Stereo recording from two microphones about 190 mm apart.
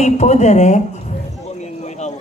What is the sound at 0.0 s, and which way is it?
Speech, 35° left (ahead or behind).